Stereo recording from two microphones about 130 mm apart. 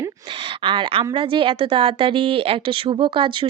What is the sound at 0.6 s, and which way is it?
A woman's voice, 40° right (ahead or behind).